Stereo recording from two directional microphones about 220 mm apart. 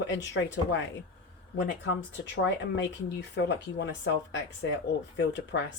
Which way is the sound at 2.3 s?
55° left (ahead or behind).